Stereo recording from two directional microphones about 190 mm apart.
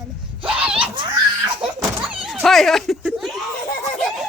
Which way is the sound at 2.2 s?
Centre (ahead or behind).